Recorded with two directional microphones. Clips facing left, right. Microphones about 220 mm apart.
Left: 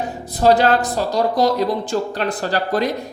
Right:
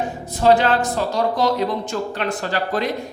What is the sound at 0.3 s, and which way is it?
Speech, 40° left (ahead or behind).